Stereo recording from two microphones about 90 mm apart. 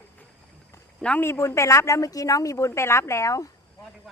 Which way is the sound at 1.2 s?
30° left (ahead or behind).